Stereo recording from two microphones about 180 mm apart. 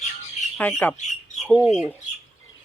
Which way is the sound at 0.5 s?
5° left (ahead or behind).